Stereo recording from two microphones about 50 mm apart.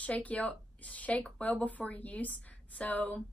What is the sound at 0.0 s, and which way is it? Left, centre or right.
A woman's voice, left.